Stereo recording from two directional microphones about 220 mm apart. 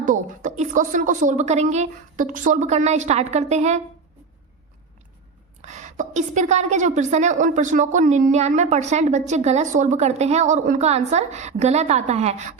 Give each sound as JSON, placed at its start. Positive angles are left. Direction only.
{"t": 0.0, "sound": "a woman's voice", "side_deg": -35}
{"t": 5.6, "sound": "a woman's voice", "side_deg": -35}